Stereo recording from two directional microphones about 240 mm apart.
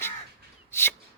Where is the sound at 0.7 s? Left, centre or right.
Centre.